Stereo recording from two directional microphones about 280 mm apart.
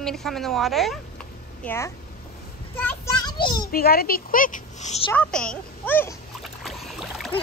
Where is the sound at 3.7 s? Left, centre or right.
Left.